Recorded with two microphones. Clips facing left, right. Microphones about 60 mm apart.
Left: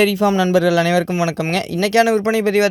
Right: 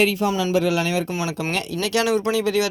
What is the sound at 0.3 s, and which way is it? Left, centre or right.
Speech, left.